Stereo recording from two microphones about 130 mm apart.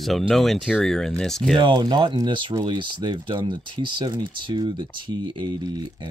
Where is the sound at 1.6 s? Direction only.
35° right (ahead or behind).